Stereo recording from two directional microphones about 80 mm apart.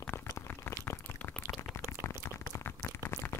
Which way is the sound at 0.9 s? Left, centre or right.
Left.